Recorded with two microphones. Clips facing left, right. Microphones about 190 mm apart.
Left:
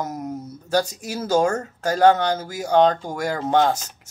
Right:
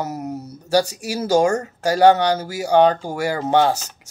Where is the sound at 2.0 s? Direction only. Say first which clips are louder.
Right 2 dB; 70° right (ahead or behind).